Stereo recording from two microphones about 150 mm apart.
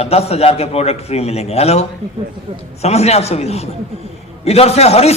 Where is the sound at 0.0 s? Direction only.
40° left (ahead or behind).